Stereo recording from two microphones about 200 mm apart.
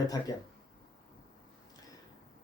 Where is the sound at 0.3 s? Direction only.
20° left (ahead or behind).